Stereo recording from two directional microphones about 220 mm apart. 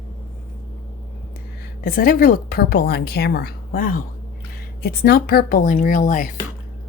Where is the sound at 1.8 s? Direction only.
40° left (ahead or behind).